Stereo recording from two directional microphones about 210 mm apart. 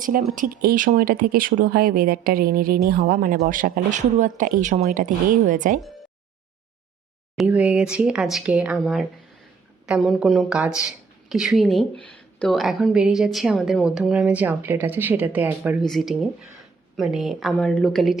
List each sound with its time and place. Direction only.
0.0 s speech: 40° right (ahead or behind)
7.3 s speech: 5° right (ahead or behind)